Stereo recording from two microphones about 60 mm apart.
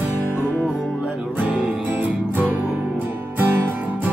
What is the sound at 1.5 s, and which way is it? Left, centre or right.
Music, right.